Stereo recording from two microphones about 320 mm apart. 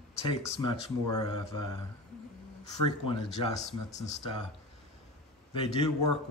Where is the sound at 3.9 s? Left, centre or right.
Left.